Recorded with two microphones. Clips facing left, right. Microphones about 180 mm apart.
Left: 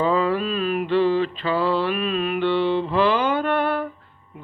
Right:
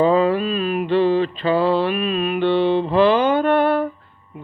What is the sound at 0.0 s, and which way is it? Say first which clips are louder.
Mantra: right 5 dB; 20° right (ahead or behind).